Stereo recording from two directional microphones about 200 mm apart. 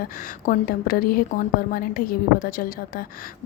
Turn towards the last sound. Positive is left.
turn(degrees=45)  # may be behind; listen again after turning